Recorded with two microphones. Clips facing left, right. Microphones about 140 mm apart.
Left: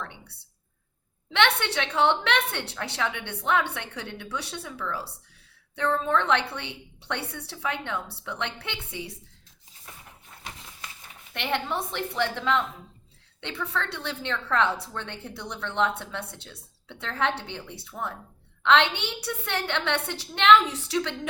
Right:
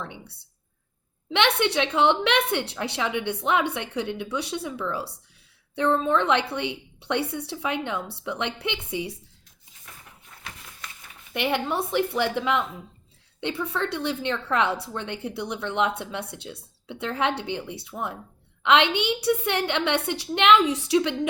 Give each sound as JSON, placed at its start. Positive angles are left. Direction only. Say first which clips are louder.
{"t": 1.3, "sound": "a woman's voice", "louder": "right 2 dB", "side_deg": -15}
{"t": 11.3, "sound": "a woman's voice", "louder": "right 4 dB", "side_deg": -5}